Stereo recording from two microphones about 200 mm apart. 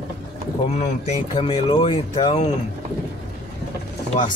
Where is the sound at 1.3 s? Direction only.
30° left (ahead or behind).